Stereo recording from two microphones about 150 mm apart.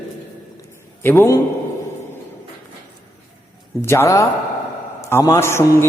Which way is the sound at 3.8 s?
15° left (ahead or behind).